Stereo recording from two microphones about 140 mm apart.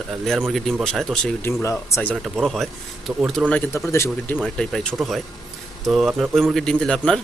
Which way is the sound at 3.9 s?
20° left (ahead or behind).